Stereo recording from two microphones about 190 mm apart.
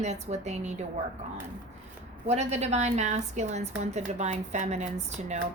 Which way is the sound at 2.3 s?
35° right (ahead or behind).